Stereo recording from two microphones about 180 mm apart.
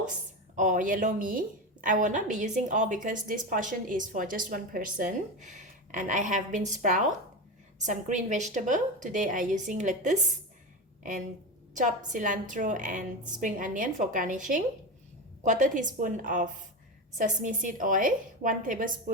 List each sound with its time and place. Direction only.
0.5 s a woman's voice: 45° right (ahead or behind)
11.7 s a woman's voice: 45° right (ahead or behind)